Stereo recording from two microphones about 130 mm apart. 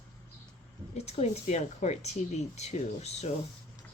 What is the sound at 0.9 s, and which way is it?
Speech, 55° left (ahead or behind).